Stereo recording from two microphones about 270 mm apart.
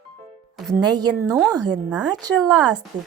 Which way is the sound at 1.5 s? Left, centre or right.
Centre.